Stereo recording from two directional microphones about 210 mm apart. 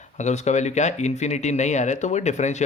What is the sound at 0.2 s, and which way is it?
Speech, 35° left (ahead or behind).